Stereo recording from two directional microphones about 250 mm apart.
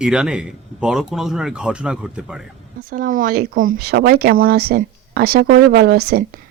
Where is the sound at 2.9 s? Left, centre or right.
Right.